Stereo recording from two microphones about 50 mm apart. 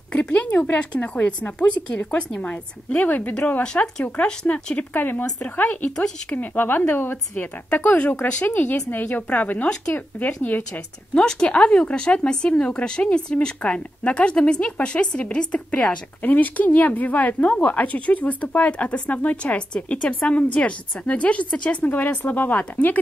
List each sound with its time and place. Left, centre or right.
0.1 s a sound: left
0.5 s speech: left
0.9 s speech: left
3.6 s speech: centre
4.9 s speech: left
11.1 s speech: centre
16.2 s speech: left
21.9 s speech: left